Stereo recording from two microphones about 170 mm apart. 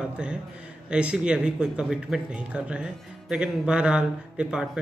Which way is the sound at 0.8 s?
5° right (ahead or behind).